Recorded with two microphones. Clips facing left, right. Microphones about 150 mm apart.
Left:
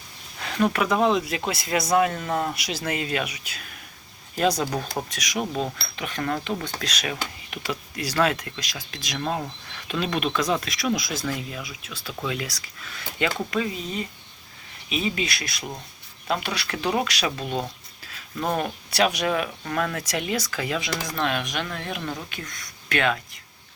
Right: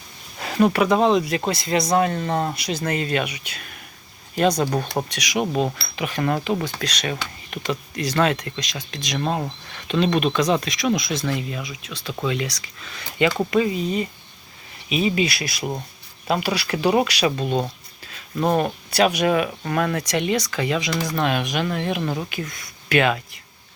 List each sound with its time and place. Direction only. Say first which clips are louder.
0.6 s speech: right 4 dB; centre (ahead or behind)
2.1 s speech: right 3 dB; 30° right (ahead or behind)
2.6 s speech: right 4 dB; 5° left (ahead or behind)
5.0 s speech: right 5 dB; centre (ahead or behind)